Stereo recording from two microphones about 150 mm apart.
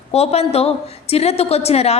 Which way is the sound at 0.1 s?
45° left (ahead or behind).